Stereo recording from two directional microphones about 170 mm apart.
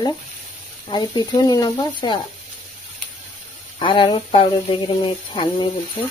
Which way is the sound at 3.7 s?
30° left (ahead or behind).